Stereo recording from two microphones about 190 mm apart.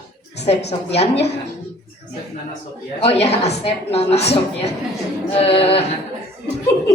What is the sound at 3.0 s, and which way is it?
A woman's voice, 35° left (ahead or behind).